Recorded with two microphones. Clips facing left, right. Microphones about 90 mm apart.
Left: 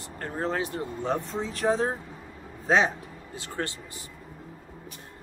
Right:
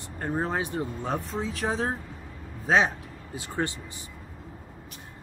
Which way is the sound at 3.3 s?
15° right (ahead or behind).